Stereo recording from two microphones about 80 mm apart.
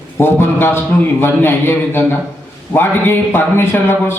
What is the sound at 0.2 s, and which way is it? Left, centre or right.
A man's voice, left.